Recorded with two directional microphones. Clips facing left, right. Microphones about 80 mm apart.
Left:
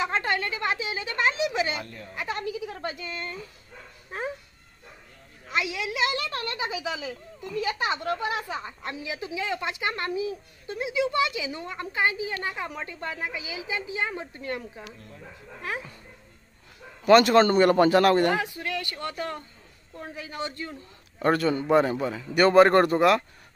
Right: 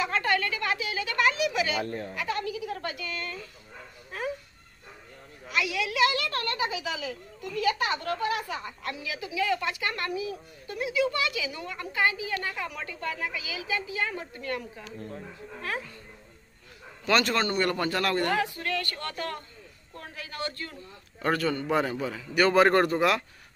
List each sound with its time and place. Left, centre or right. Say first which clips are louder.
0.0 s a woman's voice: even; left
5.5 s a woman's voice: even; left
17.0 s speech: left 8 dB; centre
17.6 s a woman's voice: left 9 dB; left
21.2 s a man's voice: left 4 dB; centre